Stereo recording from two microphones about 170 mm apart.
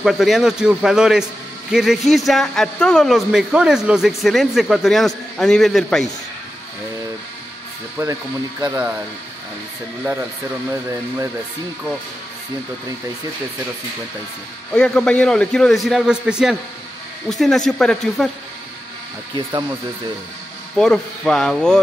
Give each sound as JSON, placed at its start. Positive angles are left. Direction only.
{"t": 0.0, "sound": "a man's voice", "side_deg": 0}
{"t": 8.0, "sound": "speech", "side_deg": -20}
{"t": 14.7, "sound": "a man's voice", "side_deg": 5}
{"t": 20.7, "sound": "a man's voice", "side_deg": 5}